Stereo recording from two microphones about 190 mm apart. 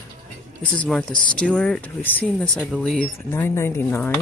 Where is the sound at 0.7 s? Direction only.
5° left (ahead or behind).